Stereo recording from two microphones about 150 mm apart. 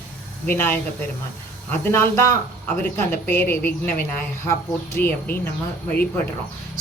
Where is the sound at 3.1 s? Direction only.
15° left (ahead or behind).